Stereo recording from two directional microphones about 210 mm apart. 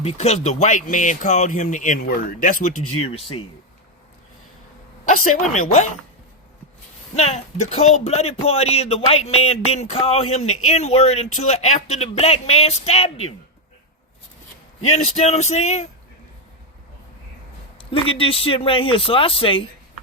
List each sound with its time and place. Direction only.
0.0 s speech: 30° left (ahead or behind)
2.8 s speech: 90° left
3.1 s speech: 25° left (ahead or behind)
5.0 s a sound: 35° left (ahead or behind)
7.2 s speech: 30° left (ahead or behind)
14.9 s speech: 35° left (ahead or behind)
17.7 s speech: 25° left (ahead or behind)